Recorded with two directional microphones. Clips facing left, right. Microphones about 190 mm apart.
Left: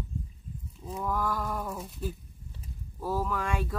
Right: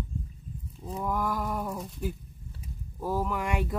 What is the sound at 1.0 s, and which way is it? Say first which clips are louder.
Speech: right 1 dB; 15° right (ahead or behind).